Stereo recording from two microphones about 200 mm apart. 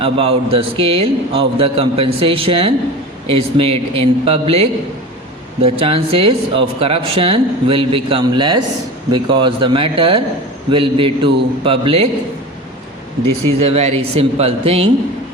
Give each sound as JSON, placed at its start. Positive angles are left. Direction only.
{"t": 0.0, "sound": "speech", "side_deg": -30}
{"t": 13.7, "sound": "speech", "side_deg": -30}